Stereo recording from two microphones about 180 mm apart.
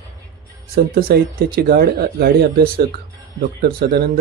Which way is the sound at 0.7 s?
55° right (ahead or behind).